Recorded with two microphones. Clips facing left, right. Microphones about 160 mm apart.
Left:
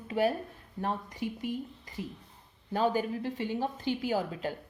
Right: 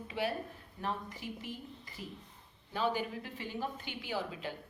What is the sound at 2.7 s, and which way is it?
A woman's voice, 45° left (ahead or behind).